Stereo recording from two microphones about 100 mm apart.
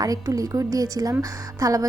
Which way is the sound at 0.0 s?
35° right (ahead or behind).